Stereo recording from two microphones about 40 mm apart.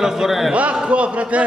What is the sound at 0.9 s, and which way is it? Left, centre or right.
Speech, right.